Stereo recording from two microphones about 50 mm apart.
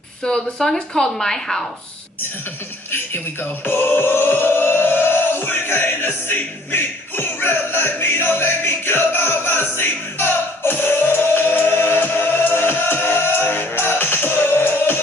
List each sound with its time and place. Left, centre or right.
0.2 s speech: centre
3.6 s music: left